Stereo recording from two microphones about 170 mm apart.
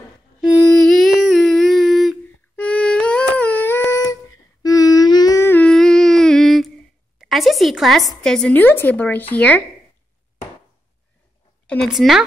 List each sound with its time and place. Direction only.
0.4 s humming: centre (ahead or behind)
7.2 s a sound: centre (ahead or behind)
8.2 s speech: 5° left (ahead or behind)
11.6 s a woman's voice: 5° left (ahead or behind)